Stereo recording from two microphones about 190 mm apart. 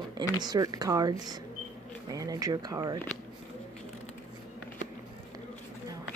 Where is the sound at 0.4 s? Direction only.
20° right (ahead or behind).